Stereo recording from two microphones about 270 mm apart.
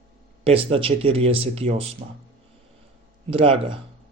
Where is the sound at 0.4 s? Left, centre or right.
Right.